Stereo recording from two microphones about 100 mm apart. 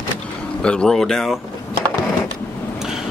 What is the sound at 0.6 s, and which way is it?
Speech, 10° left (ahead or behind).